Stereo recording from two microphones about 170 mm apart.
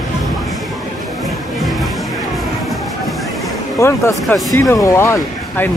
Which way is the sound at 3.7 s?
15° left (ahead or behind).